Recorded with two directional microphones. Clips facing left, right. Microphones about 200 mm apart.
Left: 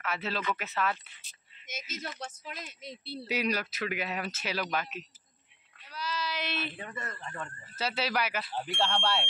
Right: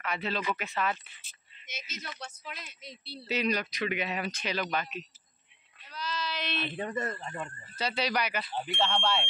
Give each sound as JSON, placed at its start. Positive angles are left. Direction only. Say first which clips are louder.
{"t": 0.0, "sound": "speech", "louder": "right 1 dB", "side_deg": 5}
{"t": 1.2, "sound": "a sound", "louder": "left 2 dB", "side_deg": 50}
{"t": 2.0, "sound": "speech", "louder": "left 3 dB", "side_deg": 50}
{"t": 3.3, "sound": "speech", "louder": "right 1 dB", "side_deg": 10}
{"t": 5.9, "sound": "a sound", "louder": "even", "side_deg": 10}
{"t": 6.9, "sound": "a man's voice", "louder": "right 7 dB", "side_deg": -35}
{"t": 7.7, "sound": "speech", "louder": "right 1 dB", "side_deg": 5}